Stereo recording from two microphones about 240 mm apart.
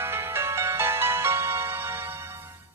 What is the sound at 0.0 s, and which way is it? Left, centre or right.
Music, centre.